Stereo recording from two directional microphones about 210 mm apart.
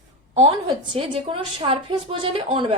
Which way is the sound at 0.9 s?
25° right (ahead or behind).